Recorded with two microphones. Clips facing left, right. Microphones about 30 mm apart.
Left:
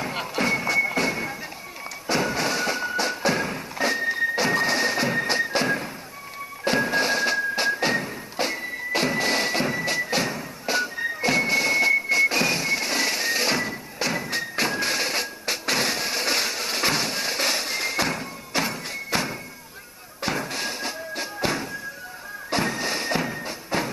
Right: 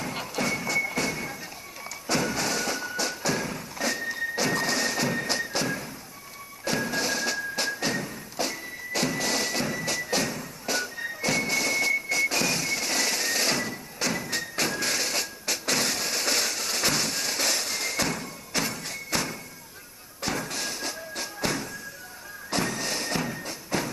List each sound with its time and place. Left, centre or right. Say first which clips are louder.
0.0 s music: left 4 dB; left